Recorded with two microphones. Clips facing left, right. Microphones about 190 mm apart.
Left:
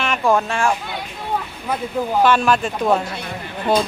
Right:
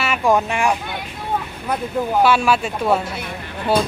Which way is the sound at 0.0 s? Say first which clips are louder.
Even; 10° right (ahead or behind).